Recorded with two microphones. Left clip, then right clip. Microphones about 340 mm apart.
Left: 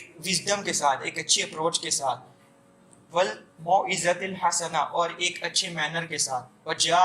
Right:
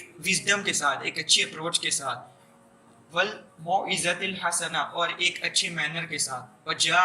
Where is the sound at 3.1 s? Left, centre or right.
Centre.